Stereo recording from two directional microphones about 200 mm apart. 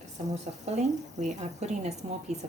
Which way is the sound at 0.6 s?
35° right (ahead or behind).